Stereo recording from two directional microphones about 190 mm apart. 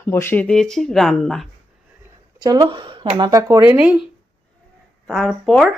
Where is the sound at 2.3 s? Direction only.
20° right (ahead or behind).